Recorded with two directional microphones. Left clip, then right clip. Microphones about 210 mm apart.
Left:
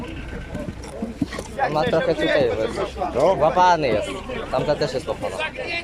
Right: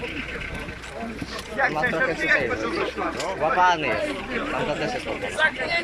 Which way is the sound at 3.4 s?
20° left (ahead or behind).